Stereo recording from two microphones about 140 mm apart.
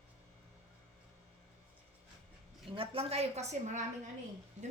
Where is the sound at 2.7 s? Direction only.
40° right (ahead or behind).